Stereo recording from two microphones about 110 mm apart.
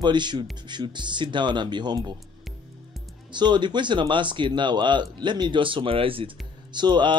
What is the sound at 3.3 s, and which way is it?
Speech, 45° right (ahead or behind).